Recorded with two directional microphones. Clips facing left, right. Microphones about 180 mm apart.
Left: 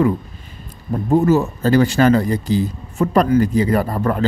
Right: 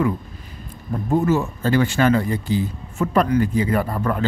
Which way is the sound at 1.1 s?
40° left (ahead or behind).